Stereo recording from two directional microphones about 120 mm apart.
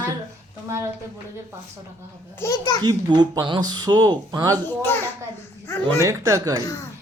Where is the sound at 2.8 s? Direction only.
35° right (ahead or behind).